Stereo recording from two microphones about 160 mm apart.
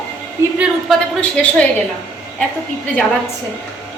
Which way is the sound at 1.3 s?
10° left (ahead or behind).